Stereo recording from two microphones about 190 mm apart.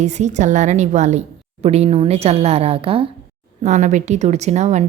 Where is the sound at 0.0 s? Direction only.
40° right (ahead or behind).